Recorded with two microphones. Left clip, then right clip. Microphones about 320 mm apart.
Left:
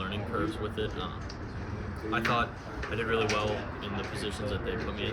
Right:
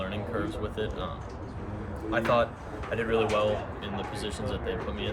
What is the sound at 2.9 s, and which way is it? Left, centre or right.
Speech, centre.